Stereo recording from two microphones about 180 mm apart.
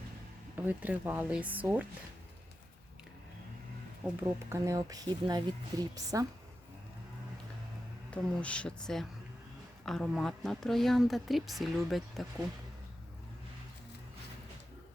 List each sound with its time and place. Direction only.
0.5 s speech: 10° right (ahead or behind)
4.0 s speech: 10° right (ahead or behind)
8.1 s a woman's voice: 5° left (ahead or behind)